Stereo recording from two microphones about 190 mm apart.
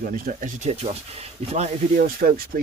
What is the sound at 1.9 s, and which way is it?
Speech, 50° right (ahead or behind).